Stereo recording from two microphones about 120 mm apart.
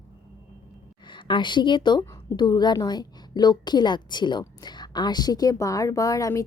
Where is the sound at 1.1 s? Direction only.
40° left (ahead or behind).